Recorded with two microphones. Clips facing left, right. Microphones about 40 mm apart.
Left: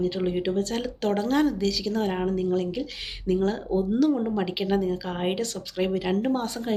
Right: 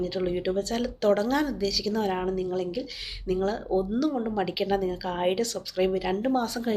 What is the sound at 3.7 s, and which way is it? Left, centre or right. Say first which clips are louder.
A woman's voice: left 4 dB; left.